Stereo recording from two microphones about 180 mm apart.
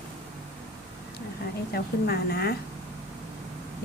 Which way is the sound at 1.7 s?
60° left (ahead or behind).